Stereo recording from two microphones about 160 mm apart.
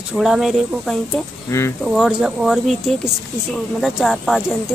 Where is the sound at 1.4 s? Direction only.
15° left (ahead or behind).